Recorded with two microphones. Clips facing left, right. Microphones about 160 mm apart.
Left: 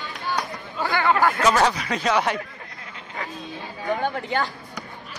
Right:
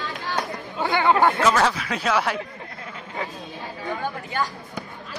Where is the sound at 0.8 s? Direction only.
20° right (ahead or behind).